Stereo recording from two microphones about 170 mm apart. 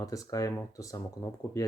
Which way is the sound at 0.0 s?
20° left (ahead or behind).